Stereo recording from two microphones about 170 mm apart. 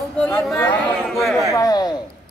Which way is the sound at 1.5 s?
20° left (ahead or behind).